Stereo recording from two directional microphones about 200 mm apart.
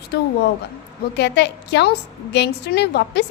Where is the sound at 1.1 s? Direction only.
60° left (ahead or behind).